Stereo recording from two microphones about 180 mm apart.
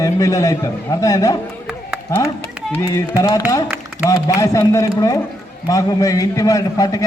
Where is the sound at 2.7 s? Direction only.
20° left (ahead or behind).